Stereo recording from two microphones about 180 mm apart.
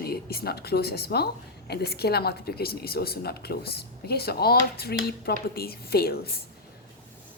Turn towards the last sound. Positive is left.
turn(degrees=60)  # may be behind; listen again after turning